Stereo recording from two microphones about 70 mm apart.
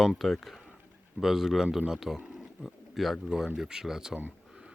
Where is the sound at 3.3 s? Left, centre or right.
Centre.